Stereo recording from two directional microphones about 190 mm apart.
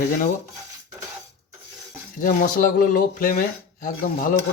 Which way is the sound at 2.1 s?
45° left (ahead or behind).